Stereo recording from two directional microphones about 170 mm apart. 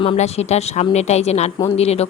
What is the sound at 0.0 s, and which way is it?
Speech, 35° left (ahead or behind).